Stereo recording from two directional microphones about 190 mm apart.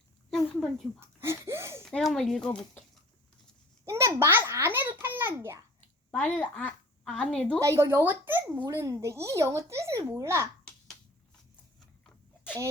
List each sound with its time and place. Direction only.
0.3 s a sound: centre (ahead or behind)
0.9 s a sound: 15° right (ahead or behind)
1.8 s speech: centre (ahead or behind)
3.8 s a child's voice: 15° right (ahead or behind)
6.1 s a woman's voice: 10° left (ahead or behind)
7.6 s a child's voice: 15° right (ahead or behind)